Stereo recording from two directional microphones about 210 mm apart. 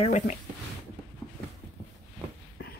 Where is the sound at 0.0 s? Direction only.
35° left (ahead or behind).